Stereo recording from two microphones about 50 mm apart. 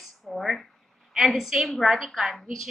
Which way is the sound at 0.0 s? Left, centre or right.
Centre.